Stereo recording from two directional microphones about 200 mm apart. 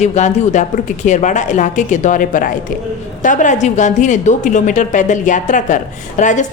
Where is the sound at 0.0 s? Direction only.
35° left (ahead or behind).